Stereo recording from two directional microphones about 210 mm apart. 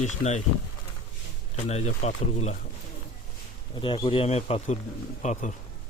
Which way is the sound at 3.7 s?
25° left (ahead or behind).